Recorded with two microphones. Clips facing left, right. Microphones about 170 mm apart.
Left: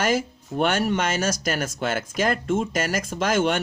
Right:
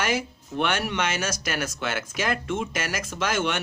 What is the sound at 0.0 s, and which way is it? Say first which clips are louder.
Speech: left 4 dB; 45° left (ahead or behind).